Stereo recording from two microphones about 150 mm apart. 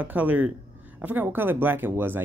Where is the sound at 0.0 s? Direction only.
10° right (ahead or behind).